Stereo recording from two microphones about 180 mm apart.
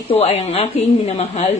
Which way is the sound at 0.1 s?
35° left (ahead or behind).